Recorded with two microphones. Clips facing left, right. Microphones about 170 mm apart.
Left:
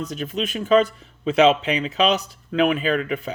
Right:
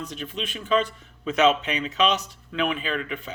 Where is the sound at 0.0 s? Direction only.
40° left (ahead or behind).